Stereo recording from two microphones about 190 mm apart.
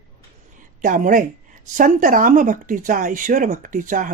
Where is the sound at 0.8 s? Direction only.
45° right (ahead or behind).